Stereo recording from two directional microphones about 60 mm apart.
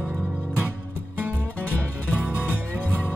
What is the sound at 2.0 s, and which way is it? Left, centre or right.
Music, left.